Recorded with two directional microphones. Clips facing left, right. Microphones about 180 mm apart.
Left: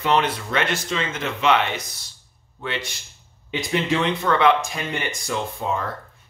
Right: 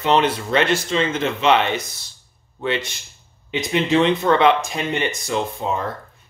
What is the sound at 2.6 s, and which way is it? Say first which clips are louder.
Speech: right 6 dB; 25° right (ahead or behind).